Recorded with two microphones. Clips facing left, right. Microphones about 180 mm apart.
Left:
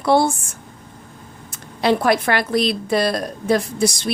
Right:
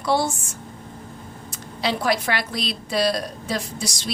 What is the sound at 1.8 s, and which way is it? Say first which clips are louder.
A woman's voice: left 6 dB; 55° left (ahead or behind).